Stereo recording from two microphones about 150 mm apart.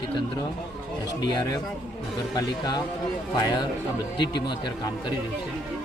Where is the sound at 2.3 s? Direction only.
30° left (ahead or behind).